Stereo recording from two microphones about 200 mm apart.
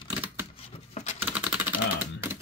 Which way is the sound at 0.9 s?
35° left (ahead or behind).